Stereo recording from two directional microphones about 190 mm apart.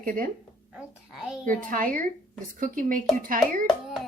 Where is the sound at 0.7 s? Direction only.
5° right (ahead or behind).